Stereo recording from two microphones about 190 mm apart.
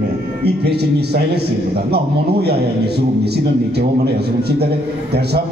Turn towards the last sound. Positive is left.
turn(degrees=-60)  # may be behind; listen again after turning